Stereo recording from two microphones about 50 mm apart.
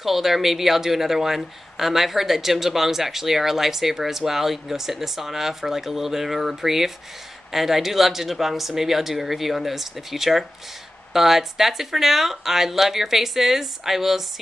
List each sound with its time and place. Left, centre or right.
0.0 s speech: centre